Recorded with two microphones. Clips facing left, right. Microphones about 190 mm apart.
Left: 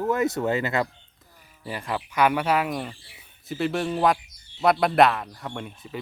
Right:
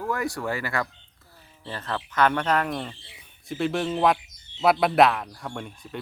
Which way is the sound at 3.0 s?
20° right (ahead or behind).